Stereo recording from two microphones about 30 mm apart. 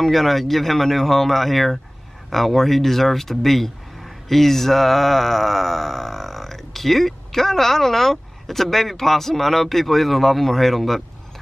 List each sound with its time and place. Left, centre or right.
0.0 s speech: centre